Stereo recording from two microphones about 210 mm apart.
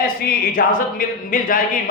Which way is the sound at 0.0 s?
45° left (ahead or behind).